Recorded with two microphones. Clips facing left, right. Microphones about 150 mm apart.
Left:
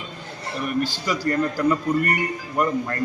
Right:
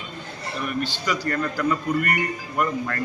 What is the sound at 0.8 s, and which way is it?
A man's voice, 40° left (ahead or behind).